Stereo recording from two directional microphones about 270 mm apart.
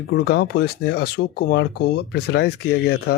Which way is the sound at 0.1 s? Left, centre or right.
Left.